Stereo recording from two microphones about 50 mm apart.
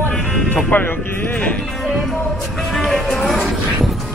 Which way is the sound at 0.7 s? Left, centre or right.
Left.